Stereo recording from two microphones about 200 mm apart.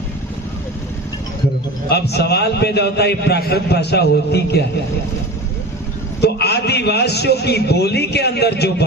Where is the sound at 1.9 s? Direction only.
55° left (ahead or behind).